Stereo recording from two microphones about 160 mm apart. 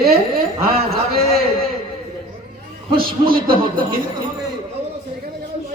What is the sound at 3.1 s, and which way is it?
Speech, 65° right (ahead or behind).